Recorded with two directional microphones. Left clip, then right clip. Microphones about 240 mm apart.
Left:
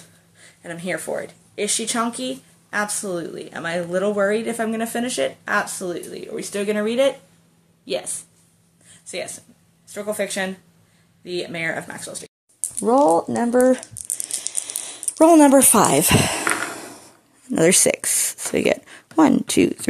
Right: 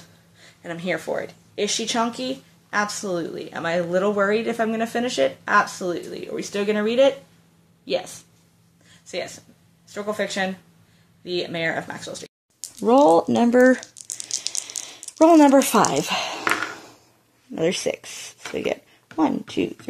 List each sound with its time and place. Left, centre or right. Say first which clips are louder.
0.4 s a woman's voice: even; centre
14.1 s rattle: right 2 dB; centre
14.6 s a sound: even; centre
15.1 s speech: left 1 dB; centre
17.5 s speech: left 6 dB; left